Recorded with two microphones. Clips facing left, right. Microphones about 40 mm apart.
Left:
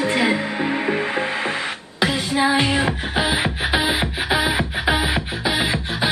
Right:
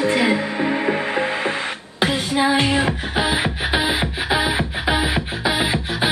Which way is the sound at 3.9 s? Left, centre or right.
Left.